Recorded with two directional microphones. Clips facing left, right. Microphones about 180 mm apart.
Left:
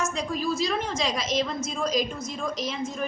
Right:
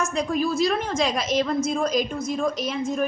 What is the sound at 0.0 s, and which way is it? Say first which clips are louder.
A woman's voice: right 4 dB; 55° right (ahead or behind).